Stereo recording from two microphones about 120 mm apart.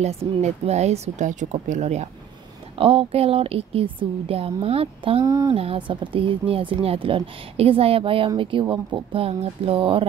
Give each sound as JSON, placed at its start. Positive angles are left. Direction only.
{"t": 0.0, "sound": "speech", "side_deg": -60}
{"t": 2.8, "sound": "speech", "side_deg": -50}
{"t": 5.2, "sound": "speech", "side_deg": -30}
{"t": 5.5, "sound": "speech", "side_deg": -50}